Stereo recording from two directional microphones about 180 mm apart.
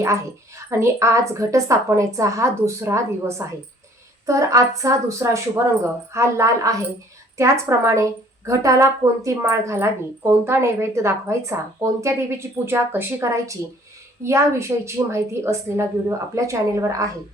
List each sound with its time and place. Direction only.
0.0 s a woman's voice: 15° right (ahead or behind)